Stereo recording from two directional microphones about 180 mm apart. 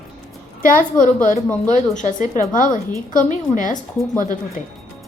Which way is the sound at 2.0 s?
45° left (ahead or behind).